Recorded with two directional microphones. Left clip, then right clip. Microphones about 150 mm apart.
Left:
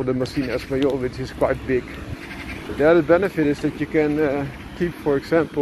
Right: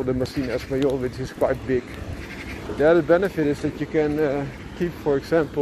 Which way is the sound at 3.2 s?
15° right (ahead or behind).